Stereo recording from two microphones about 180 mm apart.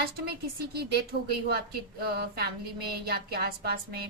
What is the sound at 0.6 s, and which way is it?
A woman's voice, 60° right (ahead or behind).